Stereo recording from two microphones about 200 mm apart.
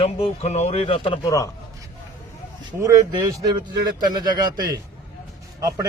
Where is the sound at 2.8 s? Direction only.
15° right (ahead or behind).